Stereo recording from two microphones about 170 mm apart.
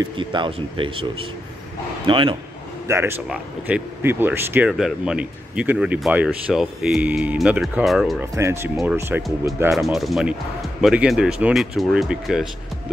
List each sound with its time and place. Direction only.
0.0 s speech: 25° right (ahead or behind)
2.0 s speech: 30° right (ahead or behind)
2.9 s speech: 15° right (ahead or behind)
8.2 s speech: 15° right (ahead or behind)
9.7 s speech: centre (ahead or behind)